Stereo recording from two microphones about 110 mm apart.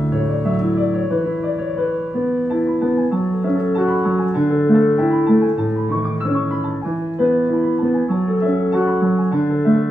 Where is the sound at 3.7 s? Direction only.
10° right (ahead or behind).